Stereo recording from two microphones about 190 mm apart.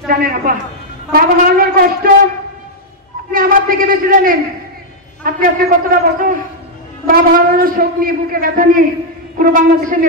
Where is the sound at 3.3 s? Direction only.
50° right (ahead or behind).